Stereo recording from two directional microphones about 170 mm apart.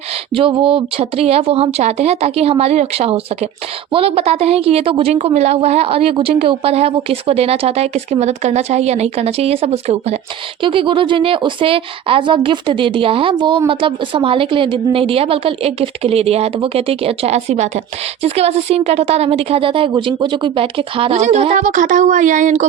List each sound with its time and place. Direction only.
0.3 s a woman's voice: 30° right (ahead or behind); by 22.6 s 45° right (ahead or behind)